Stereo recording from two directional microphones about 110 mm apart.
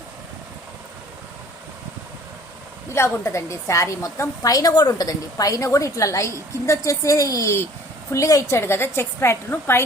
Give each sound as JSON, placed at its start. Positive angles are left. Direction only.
{"t": 2.9, "sound": "a woman's voice", "side_deg": 25}